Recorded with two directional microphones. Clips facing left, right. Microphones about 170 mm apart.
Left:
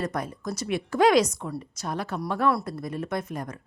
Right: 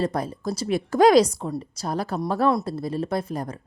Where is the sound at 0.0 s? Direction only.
30° right (ahead or behind).